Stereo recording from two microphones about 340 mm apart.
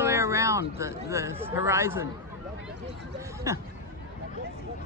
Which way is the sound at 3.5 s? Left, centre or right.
Centre.